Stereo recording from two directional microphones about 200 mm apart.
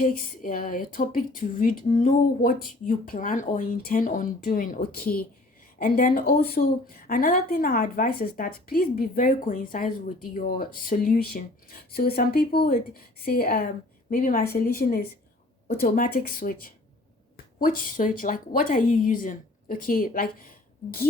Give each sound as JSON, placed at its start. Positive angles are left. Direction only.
{"t": 0.0, "sound": "a woman's voice", "side_deg": 45}